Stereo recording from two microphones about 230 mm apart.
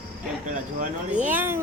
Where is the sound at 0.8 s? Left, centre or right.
Right.